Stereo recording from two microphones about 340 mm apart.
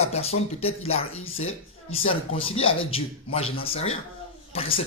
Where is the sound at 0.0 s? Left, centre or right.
Centre.